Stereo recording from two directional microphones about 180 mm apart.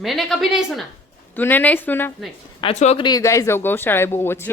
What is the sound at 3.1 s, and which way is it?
Speech, 20° left (ahead or behind).